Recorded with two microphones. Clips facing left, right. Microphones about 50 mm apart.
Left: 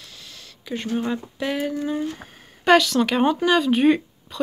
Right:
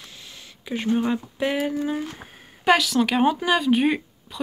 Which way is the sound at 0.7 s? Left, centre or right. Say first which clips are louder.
Right 2 dB; centre.